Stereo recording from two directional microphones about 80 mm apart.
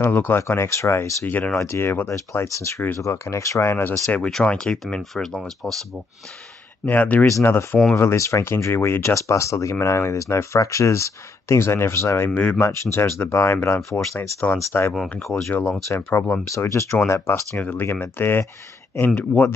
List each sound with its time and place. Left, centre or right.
0.0 s speech: left
1.2 s speech: left
1.6 s speech: left
3.7 s speech: left
4.3 s speech: centre
6.9 s speech: left
7.2 s speech: left
15.9 s speech: left
17.3 s speech: left